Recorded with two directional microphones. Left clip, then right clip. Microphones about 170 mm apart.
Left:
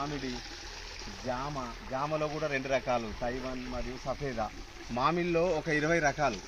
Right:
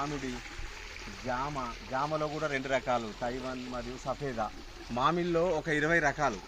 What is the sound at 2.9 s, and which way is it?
Speech, 20° left (ahead or behind).